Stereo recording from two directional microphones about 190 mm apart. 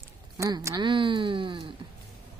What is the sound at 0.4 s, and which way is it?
Speech, 20° right (ahead or behind).